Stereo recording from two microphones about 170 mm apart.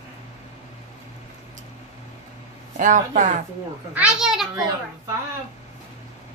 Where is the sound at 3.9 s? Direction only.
5° right (ahead or behind).